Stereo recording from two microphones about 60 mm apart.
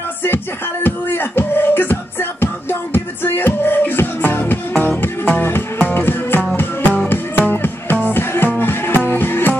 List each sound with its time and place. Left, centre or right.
0.8 s music: left